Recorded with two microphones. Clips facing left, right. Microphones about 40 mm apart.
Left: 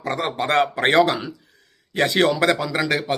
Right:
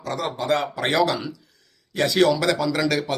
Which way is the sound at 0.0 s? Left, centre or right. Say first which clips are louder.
Left 3 dB; left.